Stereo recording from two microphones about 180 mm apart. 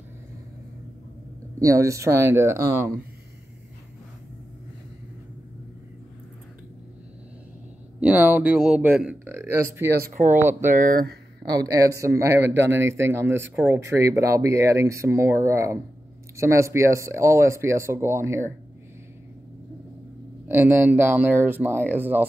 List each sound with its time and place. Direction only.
1.6 s speech: 15° right (ahead or behind)
8.0 s speech: 10° right (ahead or behind)
9.9 s speech: 50° right (ahead or behind)
10.3 s speech: 10° right (ahead or behind)
10.7 s speech: 55° right (ahead or behind)
11.4 s speech: 20° right (ahead or behind)
20.4 s speech: 10° right (ahead or behind)